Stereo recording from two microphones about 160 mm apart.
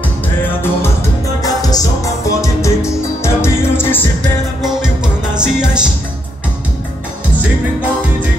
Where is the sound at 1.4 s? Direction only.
25° left (ahead or behind).